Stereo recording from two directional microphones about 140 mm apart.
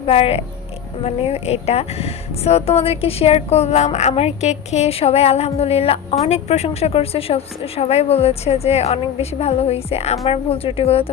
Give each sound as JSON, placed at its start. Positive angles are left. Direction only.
{"t": 0.0, "sound": "speech", "side_deg": 45}